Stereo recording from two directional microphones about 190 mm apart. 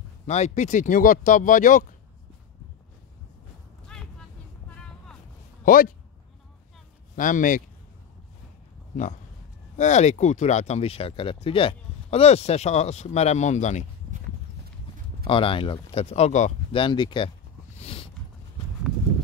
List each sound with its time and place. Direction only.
0.3 s speech: 35° left (ahead or behind)
5.7 s speech: 45° left (ahead or behind)
7.2 s speech: 45° left (ahead or behind)
9.8 s speech: 40° left (ahead or behind)
15.2 s speech: 30° left (ahead or behind)
16.8 s speech: 25° left (ahead or behind)
17.7 s a sound: 30° left (ahead or behind)